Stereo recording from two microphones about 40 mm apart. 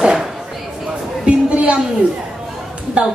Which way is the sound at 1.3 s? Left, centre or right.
Right.